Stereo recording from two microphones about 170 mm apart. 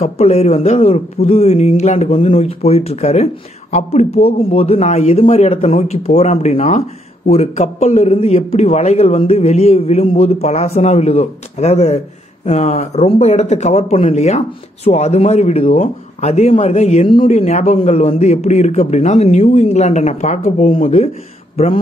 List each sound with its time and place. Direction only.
0.0 s a man's voice: 40° left (ahead or behind)